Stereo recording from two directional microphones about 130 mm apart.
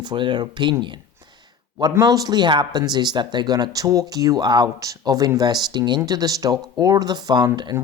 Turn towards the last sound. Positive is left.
turn(degrees=-30)  # may be behind; listen again after turning